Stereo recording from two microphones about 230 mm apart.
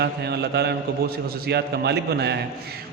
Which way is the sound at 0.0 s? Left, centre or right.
Right.